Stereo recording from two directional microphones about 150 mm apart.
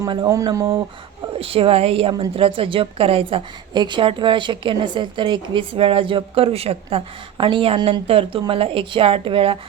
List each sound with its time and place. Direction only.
0.0 s speech: 30° right (ahead or behind)
1.4 s a woman's voice: 40° right (ahead or behind)